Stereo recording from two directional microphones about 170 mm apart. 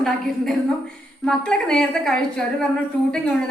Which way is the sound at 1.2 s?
5° left (ahead or behind).